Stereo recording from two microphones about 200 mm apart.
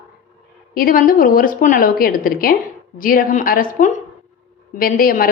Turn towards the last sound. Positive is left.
turn(degrees=45)  # may be behind; listen again after turning